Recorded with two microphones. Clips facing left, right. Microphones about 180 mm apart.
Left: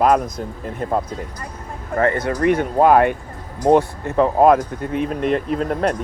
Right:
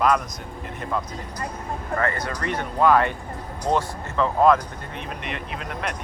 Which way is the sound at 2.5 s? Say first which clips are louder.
Left 4 dB; 50° left (ahead or behind).